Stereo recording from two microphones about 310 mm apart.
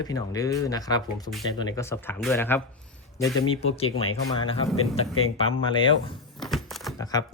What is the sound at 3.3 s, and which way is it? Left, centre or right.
Speech, left.